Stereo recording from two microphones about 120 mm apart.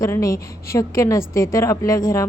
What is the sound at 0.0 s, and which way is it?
A woman's voice, 25° left (ahead or behind).